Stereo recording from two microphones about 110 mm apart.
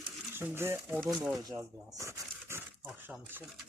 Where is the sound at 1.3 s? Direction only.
35° right (ahead or behind).